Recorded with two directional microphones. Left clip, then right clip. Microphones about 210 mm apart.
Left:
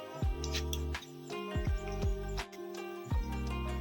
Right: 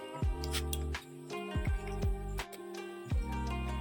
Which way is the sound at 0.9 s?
Centre (ahead or behind).